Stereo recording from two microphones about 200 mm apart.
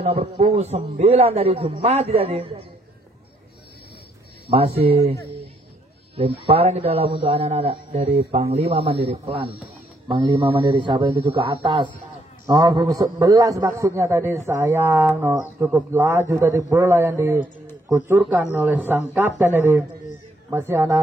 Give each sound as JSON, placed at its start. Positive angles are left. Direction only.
{"t": 0.0, "sound": "a man's voice", "side_deg": -30}
{"t": 4.5, "sound": "a man's voice", "side_deg": -30}
{"t": 6.1, "sound": "a man's voice", "side_deg": -30}